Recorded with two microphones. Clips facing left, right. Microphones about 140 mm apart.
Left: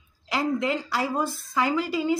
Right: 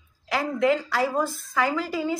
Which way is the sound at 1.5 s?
15° left (ahead or behind).